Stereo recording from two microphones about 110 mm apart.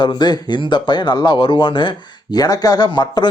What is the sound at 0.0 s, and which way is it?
Speech, 45° left (ahead or behind).